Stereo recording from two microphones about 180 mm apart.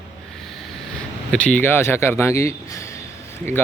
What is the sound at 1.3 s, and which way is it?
Speech, 5° left (ahead or behind).